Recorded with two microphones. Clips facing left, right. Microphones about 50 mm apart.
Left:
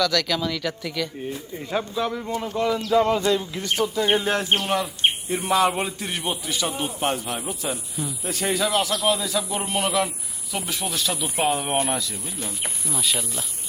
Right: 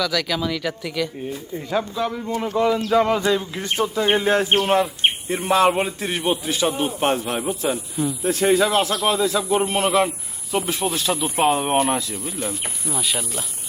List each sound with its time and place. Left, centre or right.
0.0 s a man's voice: centre
2.7 s speech: right
3.2 s a man's voice: right